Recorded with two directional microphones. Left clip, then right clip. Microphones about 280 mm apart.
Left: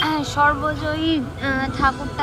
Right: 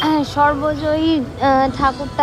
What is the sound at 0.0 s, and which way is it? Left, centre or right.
Speech, centre.